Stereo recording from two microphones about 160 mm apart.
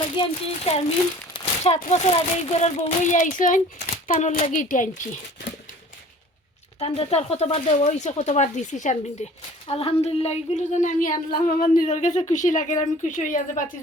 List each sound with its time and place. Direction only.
0.2 s speech: 35° left (ahead or behind); by 5.5 s 75° left (ahead or behind)
6.7 s a woman's voice: 40° left (ahead or behind); by 13.7 s 55° left (ahead or behind)